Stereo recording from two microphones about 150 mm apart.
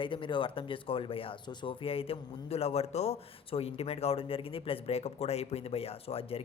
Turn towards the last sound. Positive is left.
turn(degrees=40)  # may be behind; listen again after turning